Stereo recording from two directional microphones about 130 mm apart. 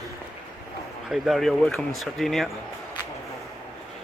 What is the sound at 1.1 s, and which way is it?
Speech, centre (ahead or behind).